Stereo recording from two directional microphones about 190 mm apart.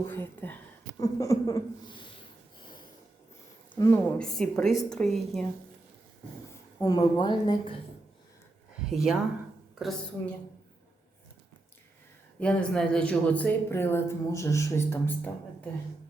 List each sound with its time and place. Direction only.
0.0 s a woman's voice: 10° left (ahead or behind)
3.8 s speech: 15° left (ahead or behind)
4.2 s a woman's voice: 5° left (ahead or behind)
6.5 s a woman's voice: 15° left (ahead or behind)
8.9 s a woman's voice: centre (ahead or behind)
12.4 s speech: 5° left (ahead or behind)